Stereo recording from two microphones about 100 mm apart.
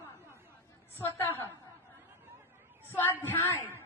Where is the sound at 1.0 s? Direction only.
20° left (ahead or behind).